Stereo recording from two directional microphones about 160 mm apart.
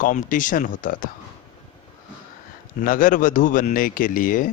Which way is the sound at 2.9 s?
55° left (ahead or behind).